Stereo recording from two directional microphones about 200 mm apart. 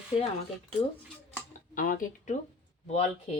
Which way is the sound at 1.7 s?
45° left (ahead or behind).